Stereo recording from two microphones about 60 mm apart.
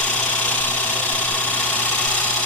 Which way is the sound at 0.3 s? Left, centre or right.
Left.